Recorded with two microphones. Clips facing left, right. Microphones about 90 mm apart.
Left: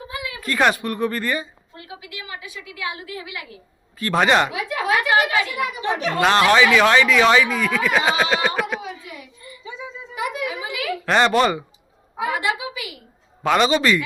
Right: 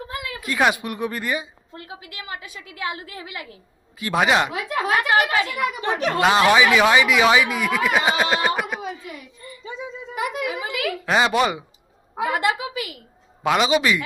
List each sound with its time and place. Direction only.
0.1 s a sound: 50° right (ahead or behind)
0.4 s speech: 5° right (ahead or behind)
1.7 s a woman's voice: 40° right (ahead or behind)
3.9 s speech: 10° right (ahead or behind)
4.7 s a woman's voice: 40° right (ahead or behind)
6.1 s speech: 10° right (ahead or behind)
10.2 s a sound: 50° right (ahead or behind)
11.0 s speech: 5° right (ahead or behind)
12.3 s a woman's voice: 50° right (ahead or behind)
13.4 s speech: 5° right (ahead or behind)